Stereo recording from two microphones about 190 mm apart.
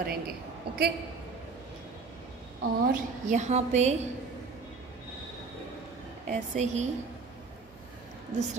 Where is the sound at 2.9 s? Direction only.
40° right (ahead or behind).